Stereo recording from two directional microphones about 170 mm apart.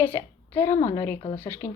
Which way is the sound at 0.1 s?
15° left (ahead or behind).